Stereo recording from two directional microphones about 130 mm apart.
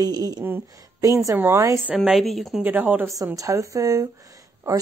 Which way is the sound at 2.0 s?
Centre (ahead or behind).